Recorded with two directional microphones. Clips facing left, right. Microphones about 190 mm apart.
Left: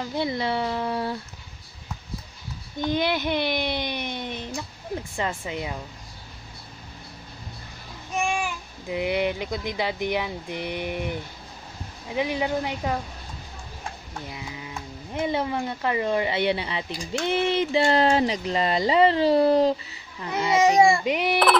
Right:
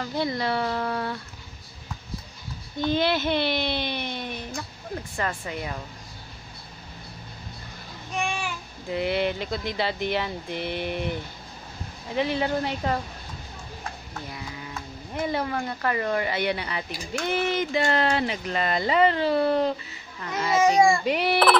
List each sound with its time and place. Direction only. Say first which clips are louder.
0.0 s speech: even; 20° left (ahead or behind)
2.8 s speech: right 1 dB; 15° left (ahead or behind)
8.8 s speech: even; 15° left (ahead or behind)
14.3 s speech: even; 15° left (ahead or behind); by 19.7 s 35° left (ahead or behind)
20.2 s speech: left 1 dB; 15° left (ahead or behind)